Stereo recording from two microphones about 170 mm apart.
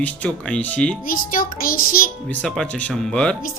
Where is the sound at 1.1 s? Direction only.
55° left (ahead or behind).